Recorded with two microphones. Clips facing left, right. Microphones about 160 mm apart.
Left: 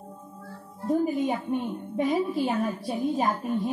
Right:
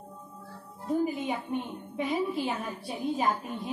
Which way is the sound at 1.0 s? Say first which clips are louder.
Left 5 dB; 40° left (ahead or behind).